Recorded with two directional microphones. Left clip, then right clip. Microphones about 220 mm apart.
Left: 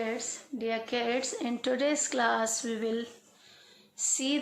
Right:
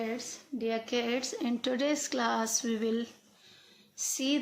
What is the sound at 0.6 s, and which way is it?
Speech, 25° right (ahead or behind).